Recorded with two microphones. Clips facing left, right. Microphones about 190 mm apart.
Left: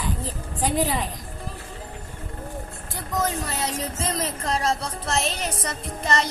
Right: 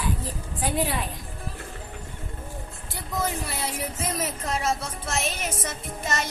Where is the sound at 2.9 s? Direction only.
10° right (ahead or behind).